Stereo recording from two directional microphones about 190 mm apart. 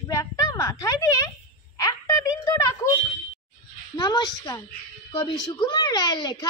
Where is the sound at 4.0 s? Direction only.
20° left (ahead or behind).